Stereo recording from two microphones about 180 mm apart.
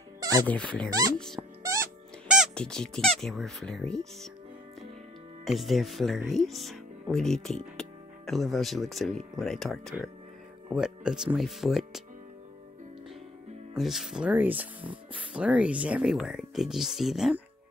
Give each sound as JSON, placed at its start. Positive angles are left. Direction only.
{"t": 0.5, "sound": "speech", "side_deg": 5}
{"t": 0.8, "sound": "speech", "side_deg": -20}
{"t": 1.1, "sound": "speech", "side_deg": 0}
{"t": 1.6, "sound": "music", "side_deg": -15}
{"t": 2.2, "sound": "speech", "side_deg": -5}
{"t": 5.4, "sound": "speech", "side_deg": 0}
{"t": 13.7, "sound": "speech", "side_deg": 0}